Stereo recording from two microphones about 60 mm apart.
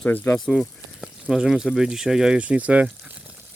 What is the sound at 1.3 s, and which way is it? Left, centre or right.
Speech, centre.